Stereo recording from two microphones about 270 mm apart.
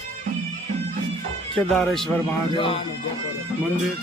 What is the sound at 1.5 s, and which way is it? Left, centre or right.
Speech, centre.